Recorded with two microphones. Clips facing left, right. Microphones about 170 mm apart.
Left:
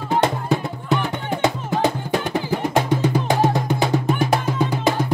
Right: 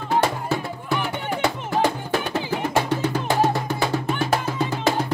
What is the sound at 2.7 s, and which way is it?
Music, 15° left (ahead or behind).